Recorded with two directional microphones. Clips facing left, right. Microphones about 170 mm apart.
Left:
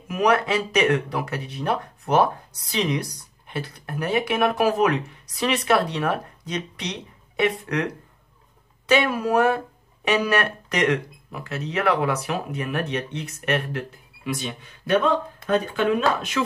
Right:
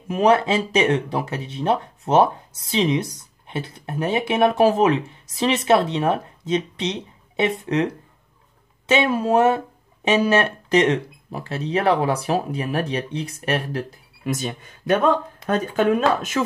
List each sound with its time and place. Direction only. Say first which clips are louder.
0.1 s speech: right 3 dB; 30° right (ahead or behind); by 16.0 s 45° right (ahead or behind)